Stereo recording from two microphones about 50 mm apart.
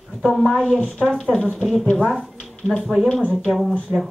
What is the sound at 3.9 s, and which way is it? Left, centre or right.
Speech, right.